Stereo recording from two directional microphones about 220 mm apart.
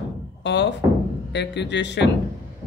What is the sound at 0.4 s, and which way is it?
Speech, 55° left (ahead or behind).